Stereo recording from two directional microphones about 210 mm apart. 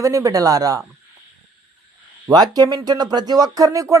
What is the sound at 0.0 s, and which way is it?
Speech, 15° right (ahead or behind).